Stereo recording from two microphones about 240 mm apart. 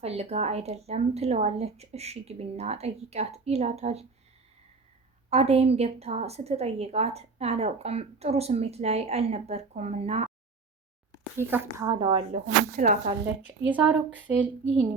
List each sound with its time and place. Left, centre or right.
0.0 s a woman's voice: right
5.3 s a woman's voice: right
11.3 s a woman's voice: centre; by 13.0 s right
13.7 s speech: centre